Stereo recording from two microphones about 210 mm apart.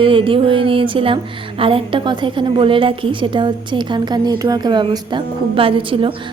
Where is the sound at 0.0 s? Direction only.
25° right (ahead or behind).